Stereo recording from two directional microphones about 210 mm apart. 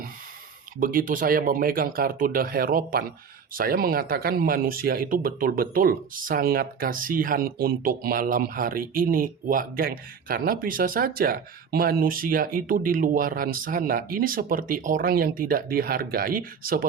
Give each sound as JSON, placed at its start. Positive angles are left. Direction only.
{"t": 0.8, "sound": "speech", "side_deg": -40}